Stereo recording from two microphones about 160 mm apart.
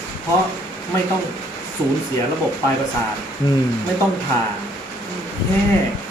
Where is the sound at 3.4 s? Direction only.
30° left (ahead or behind).